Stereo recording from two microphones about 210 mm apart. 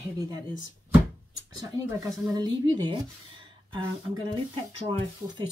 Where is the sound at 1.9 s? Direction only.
15° right (ahead or behind).